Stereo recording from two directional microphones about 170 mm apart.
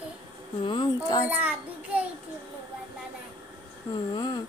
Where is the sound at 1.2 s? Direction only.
10° right (ahead or behind).